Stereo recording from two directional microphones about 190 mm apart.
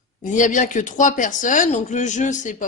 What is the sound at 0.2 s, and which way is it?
Speech, 40° left (ahead or behind).